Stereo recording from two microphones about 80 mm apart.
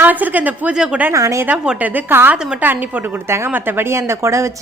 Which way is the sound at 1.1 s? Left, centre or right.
Right.